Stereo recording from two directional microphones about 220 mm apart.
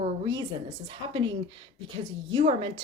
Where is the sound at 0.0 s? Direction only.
20° right (ahead or behind).